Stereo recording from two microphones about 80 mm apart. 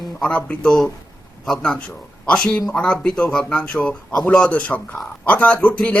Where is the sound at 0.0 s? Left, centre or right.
Centre.